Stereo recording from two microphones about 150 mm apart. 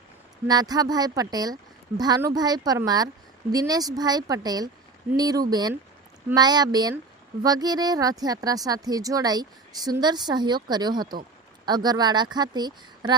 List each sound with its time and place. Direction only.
0.4 s speech: 25° right (ahead or behind)